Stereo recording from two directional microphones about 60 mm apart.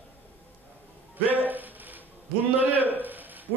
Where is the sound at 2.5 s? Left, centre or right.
Right.